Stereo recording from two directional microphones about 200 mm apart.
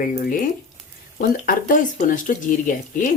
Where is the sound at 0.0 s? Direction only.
40° left (ahead or behind).